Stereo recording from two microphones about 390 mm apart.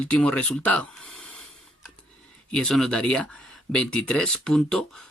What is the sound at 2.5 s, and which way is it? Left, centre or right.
Speech, centre.